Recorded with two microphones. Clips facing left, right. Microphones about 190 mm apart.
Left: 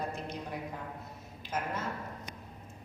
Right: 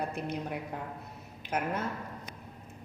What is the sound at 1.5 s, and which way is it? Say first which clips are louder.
Speech: right 3 dB; 65° right (ahead or behind).